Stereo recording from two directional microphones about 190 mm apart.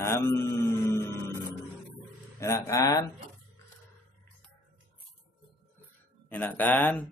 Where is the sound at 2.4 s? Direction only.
15° left (ahead or behind).